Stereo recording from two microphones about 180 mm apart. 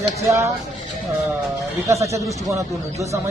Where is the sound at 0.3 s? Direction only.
15° right (ahead or behind).